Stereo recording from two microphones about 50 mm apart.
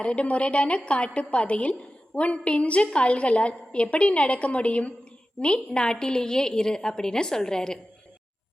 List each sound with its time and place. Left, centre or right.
0.0 s a woman's voice: left